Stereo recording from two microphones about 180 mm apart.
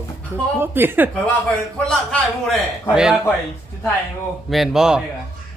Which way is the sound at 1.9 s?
Centre (ahead or behind).